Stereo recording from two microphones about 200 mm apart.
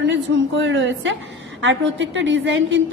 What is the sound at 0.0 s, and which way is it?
A woman's voice, 65° right (ahead or behind).